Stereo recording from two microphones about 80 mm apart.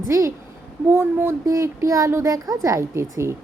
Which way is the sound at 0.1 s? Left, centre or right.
Right.